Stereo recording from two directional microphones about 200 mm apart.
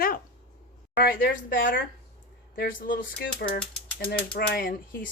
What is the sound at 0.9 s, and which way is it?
Speech, 50° left (ahead or behind).